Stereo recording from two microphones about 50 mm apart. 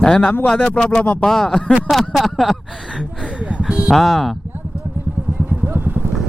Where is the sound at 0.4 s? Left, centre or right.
Centre.